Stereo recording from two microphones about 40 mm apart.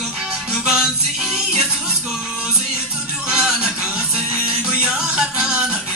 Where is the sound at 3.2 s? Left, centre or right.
Centre.